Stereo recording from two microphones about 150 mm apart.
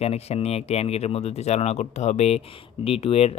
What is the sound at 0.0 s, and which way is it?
Speech, 45° left (ahead or behind).